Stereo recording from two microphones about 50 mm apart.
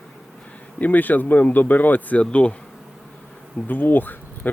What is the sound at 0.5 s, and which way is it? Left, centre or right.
Speech, left.